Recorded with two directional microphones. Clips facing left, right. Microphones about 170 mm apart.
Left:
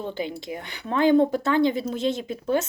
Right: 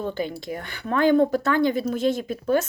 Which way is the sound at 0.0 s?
20° left (ahead or behind).